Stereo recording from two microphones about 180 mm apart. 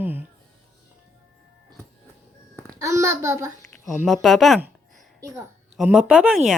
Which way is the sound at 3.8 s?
Centre (ahead or behind).